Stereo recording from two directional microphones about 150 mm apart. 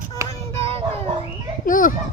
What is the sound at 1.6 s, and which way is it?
Speech, 65° left (ahead or behind).